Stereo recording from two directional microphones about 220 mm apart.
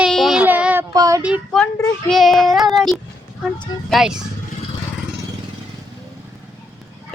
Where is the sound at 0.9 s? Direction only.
15° right (ahead or behind).